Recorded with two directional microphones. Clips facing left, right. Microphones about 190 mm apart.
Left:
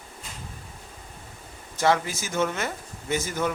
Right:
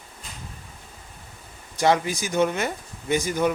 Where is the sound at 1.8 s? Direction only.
15° right (ahead or behind).